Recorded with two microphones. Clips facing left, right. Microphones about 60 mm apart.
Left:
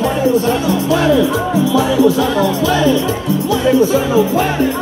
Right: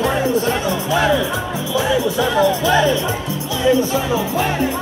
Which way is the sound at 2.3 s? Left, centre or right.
Right.